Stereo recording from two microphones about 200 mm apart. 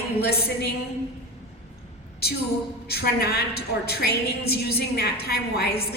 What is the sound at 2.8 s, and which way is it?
A woman's voice, 50° left (ahead or behind).